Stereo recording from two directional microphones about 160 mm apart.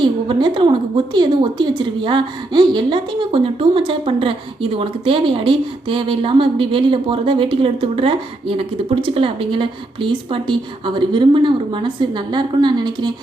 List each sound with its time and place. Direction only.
0.0 s a woman's voice: 30° right (ahead or behind)